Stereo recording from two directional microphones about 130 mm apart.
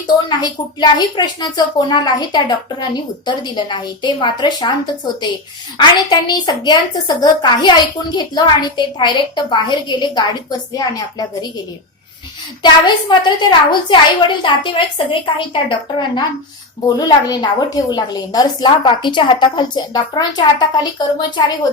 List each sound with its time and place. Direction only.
0.3 s a woman's voice: 35° left (ahead or behind)
5.7 s a woman's voice: 35° left (ahead or behind)
12.6 s a woman's voice: 35° left (ahead or behind)